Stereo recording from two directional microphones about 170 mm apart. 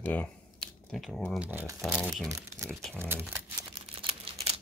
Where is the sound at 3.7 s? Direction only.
30° right (ahead or behind).